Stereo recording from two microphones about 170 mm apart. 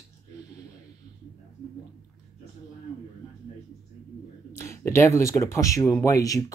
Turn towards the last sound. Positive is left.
turn(degrees=20)  # may be behind; listen again after turning